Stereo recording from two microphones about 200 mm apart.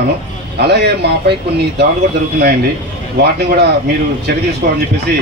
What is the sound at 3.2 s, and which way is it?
Speech, 55° right (ahead or behind).